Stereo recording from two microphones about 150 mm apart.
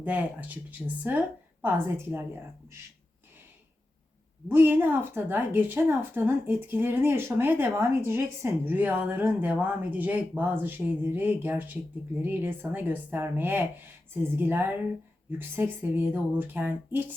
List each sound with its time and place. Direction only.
0.0 s speech: 10° right (ahead or behind)
4.4 s speech: 15° right (ahead or behind)